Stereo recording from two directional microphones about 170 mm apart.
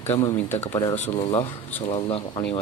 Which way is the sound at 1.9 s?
30° left (ahead or behind).